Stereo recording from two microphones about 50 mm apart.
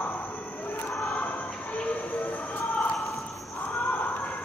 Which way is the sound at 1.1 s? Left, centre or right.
Left.